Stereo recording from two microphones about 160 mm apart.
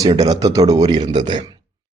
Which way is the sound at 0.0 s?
25° right (ahead or behind).